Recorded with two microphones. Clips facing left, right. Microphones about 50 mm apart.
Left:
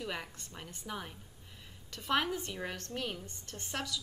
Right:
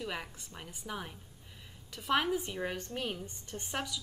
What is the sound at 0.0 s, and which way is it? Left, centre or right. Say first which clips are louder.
A woman's voice: right 1 dB; centre.